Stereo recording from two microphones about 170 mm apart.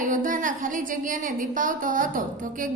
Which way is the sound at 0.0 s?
50° right (ahead or behind).